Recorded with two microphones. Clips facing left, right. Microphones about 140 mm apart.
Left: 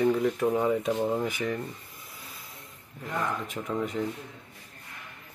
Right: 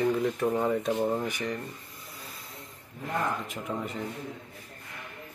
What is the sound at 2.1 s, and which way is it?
Vehicle, centre (ahead or behind).